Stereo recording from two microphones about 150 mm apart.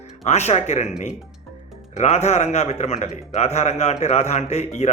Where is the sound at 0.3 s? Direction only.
50° left (ahead or behind).